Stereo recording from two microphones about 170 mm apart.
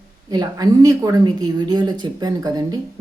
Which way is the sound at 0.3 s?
20° right (ahead or behind).